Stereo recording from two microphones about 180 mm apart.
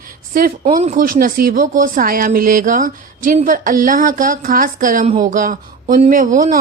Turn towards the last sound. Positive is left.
turn(degrees=-50)  # may be behind; listen again after turning